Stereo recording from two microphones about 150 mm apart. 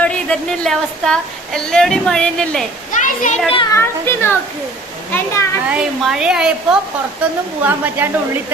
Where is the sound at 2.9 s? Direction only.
55° left (ahead or behind).